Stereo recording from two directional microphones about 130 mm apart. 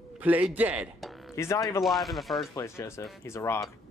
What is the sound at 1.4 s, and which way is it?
Speech, 25° left (ahead or behind).